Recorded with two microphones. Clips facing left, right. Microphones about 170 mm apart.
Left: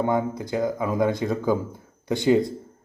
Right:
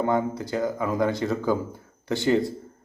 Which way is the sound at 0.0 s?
15° left (ahead or behind).